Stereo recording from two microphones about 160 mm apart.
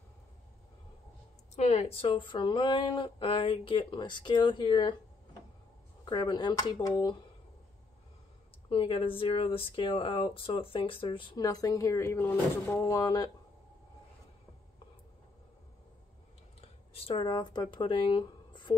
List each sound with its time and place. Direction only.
1.6 s speech: 45° left (ahead or behind)
6.0 s speech: 25° left (ahead or behind)
8.6 s speech: 35° left (ahead or behind)
16.6 s speech: 40° left (ahead or behind)